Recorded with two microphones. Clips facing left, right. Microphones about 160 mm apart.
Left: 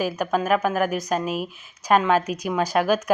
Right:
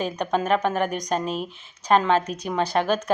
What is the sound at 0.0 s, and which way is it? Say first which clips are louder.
A woman's voice: left 1 dB; 5° left (ahead or behind).